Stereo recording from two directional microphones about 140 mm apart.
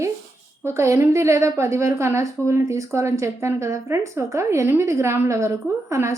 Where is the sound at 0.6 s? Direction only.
20° right (ahead or behind).